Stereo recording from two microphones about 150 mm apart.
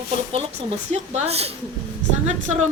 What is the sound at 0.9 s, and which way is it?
Speech, 45° right (ahead or behind).